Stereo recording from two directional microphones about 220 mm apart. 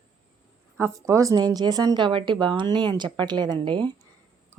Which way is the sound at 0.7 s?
15° right (ahead or behind).